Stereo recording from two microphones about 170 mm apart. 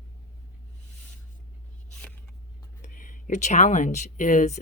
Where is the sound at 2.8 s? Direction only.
50° left (ahead or behind).